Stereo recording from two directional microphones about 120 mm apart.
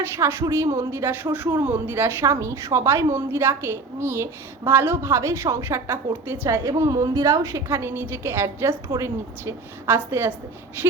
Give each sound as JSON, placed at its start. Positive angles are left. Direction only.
{"t": 0.2, "sound": "speech", "side_deg": -20}